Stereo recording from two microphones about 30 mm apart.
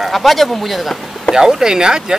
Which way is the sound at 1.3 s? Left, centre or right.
Centre.